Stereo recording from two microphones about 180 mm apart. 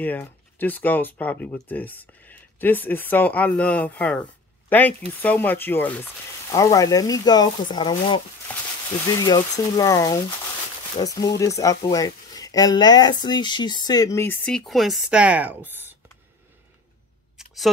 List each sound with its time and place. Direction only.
0.0 s speech: 10° left (ahead or behind); by 8.2 s 25° left (ahead or behind)
8.5 s speech: 10° left (ahead or behind)
9.2 s speech: 20° left (ahead or behind); by 16.0 s 10° right (ahead or behind)
17.4 s a sound: 5° right (ahead or behind)